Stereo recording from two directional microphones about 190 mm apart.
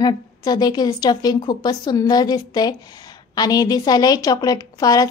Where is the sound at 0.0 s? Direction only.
20° left (ahead or behind).